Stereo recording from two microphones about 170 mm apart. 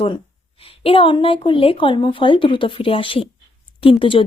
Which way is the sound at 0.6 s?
35° left (ahead or behind).